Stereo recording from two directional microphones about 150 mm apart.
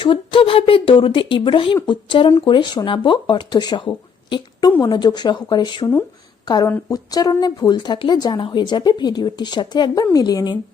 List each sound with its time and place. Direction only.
0.0 s speech: 35° left (ahead or behind)